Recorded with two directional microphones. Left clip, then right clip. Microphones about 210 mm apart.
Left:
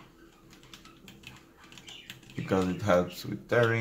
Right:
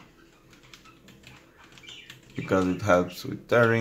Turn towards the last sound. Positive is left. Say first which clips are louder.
# right 4 dB
turn(degrees=-15)  # may be behind; listen again after turning